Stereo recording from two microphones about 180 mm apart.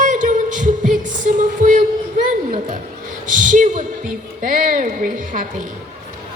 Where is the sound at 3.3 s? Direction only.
45° right (ahead or behind).